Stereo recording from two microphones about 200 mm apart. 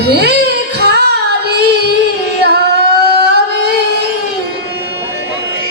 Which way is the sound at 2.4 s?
55° right (ahead or behind).